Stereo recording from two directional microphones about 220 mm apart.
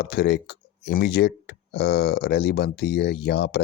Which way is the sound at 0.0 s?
50° left (ahead or behind).